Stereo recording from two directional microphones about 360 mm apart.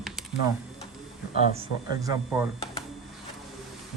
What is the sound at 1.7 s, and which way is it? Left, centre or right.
Speech, left.